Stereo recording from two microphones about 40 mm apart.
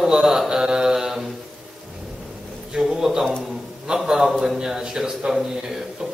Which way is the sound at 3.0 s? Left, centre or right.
Centre.